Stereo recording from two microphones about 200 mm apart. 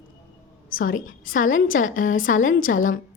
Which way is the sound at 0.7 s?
45° left (ahead or behind).